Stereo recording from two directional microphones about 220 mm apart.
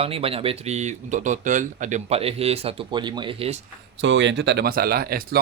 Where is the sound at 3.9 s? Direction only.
55° right (ahead or behind).